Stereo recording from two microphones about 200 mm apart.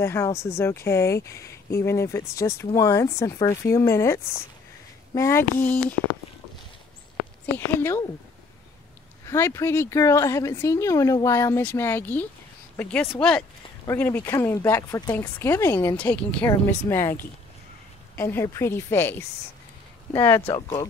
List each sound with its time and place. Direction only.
0.0 s speech: 15° left (ahead or behind)
7.5 s speech: 10° left (ahead or behind)
9.2 s speech: 15° left (ahead or behind)
20.4 s speech: 25° left (ahead or behind)